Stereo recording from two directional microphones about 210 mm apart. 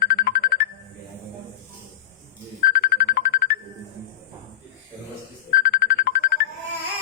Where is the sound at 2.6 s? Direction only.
45° left (ahead or behind).